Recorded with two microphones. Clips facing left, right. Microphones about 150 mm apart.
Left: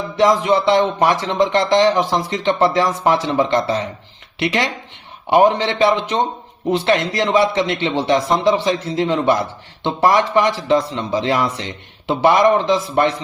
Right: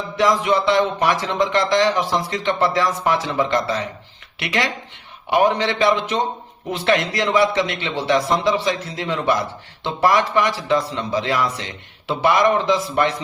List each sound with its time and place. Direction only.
0.2 s speech: 25° left (ahead or behind)